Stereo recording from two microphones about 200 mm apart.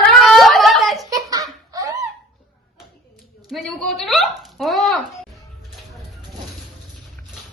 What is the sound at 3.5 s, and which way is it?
Hiccup, centre (ahead or behind).